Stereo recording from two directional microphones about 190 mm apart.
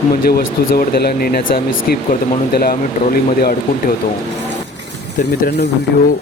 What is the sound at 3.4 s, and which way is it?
Speech, 50° left (ahead or behind).